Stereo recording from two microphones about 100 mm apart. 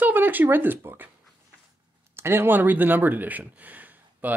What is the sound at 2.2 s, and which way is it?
Speech, 25° right (ahead or behind).